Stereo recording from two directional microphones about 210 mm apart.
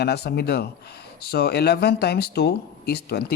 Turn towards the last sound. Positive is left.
turn(degrees=50)  # may be behind; listen again after turning